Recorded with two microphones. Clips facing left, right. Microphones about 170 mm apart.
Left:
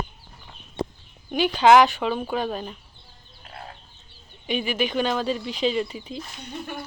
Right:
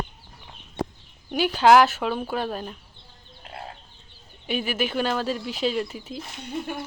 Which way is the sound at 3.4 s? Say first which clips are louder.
Right 3 dB; 25° right (ahead or behind).